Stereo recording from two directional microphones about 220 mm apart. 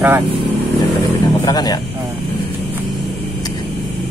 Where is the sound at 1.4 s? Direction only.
15° left (ahead or behind).